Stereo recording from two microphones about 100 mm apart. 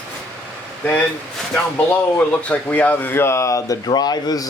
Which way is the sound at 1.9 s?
15° left (ahead or behind).